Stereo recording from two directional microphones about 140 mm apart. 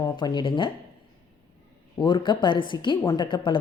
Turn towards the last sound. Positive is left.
turn(degrees=35)  # may be behind; listen again after turning